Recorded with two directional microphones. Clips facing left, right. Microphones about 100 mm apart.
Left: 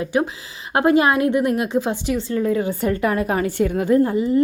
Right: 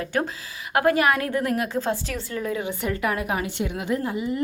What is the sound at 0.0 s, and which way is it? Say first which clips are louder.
A woman's voice: left 5 dB; 15° left (ahead or behind).